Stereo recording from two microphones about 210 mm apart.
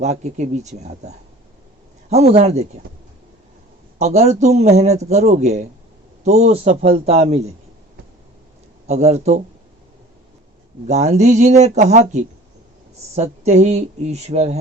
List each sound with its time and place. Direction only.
0.0 s a man's voice: 35° right (ahead or behind)
3.9 s a man's voice: 30° right (ahead or behind)
8.9 s a man's voice: 30° right (ahead or behind)
10.8 s a man's voice: 30° right (ahead or behind)